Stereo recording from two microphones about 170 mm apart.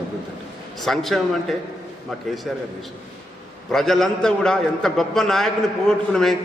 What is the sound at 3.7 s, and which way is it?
A man's voice, centre (ahead or behind).